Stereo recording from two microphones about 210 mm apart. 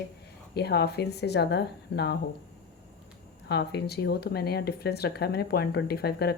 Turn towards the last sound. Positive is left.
turn(degrees=50)  # may be behind; listen again after turning